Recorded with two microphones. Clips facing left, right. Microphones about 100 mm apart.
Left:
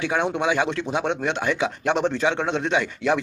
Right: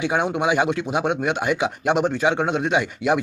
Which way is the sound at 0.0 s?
10° right (ahead or behind).